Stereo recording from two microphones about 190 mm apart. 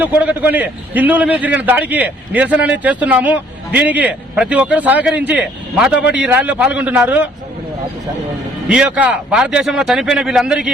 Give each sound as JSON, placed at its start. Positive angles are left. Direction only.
{"t": 0.0, "sound": "a man's voice", "side_deg": -10}
{"t": 8.7, "sound": "a man's voice", "side_deg": -5}